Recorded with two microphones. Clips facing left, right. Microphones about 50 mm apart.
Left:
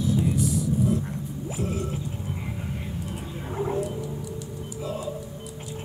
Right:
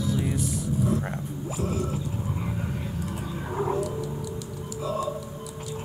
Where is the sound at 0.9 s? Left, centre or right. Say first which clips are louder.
Even; right.